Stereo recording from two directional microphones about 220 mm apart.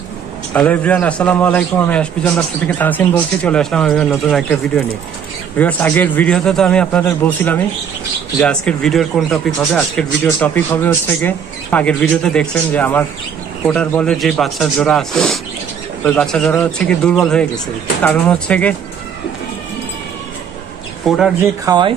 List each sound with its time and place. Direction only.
0.5 s a man's voice: 5° left (ahead or behind)
21.0 s speech: centre (ahead or behind)
21.6 s speech: 20° right (ahead or behind)